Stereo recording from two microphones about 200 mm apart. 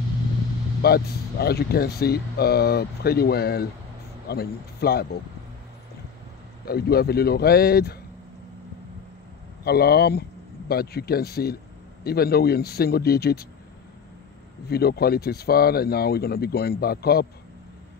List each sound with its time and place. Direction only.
0.8 s speech: 50° left (ahead or behind)
6.6 s speech: 50° left (ahead or behind)
9.7 s speech: 50° left (ahead or behind)
14.7 s speech: 50° left (ahead or behind)